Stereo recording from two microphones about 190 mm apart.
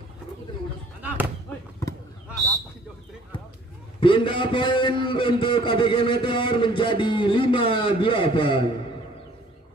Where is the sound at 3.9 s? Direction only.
25° left (ahead or behind).